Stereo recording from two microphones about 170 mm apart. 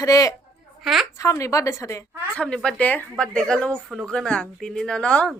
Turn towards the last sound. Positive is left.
turn(degrees=5)  # may be behind; listen again after turning